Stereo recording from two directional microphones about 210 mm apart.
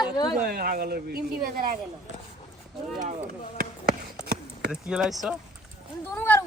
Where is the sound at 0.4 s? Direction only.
45° right (ahead or behind).